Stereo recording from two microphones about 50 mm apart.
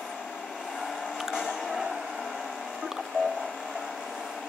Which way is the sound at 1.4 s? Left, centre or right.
Centre.